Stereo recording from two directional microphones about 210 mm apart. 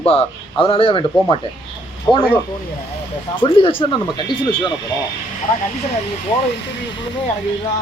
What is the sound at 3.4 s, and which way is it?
A man's voice, 25° left (ahead or behind).